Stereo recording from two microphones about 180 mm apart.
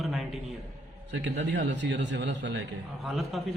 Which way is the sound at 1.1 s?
75° right (ahead or behind).